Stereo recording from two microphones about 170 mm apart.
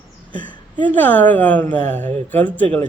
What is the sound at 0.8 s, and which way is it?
Speech, 10° left (ahead or behind).